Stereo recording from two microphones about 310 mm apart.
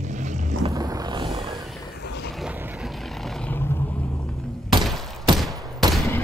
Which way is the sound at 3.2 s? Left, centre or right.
Centre.